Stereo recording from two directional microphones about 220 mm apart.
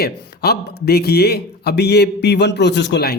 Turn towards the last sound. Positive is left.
turn(degrees=50)  # may be behind; listen again after turning